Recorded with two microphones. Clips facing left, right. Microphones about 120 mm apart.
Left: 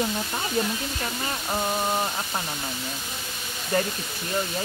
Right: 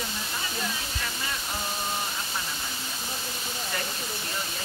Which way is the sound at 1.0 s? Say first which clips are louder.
Left 4 dB; 40° left (ahead or behind).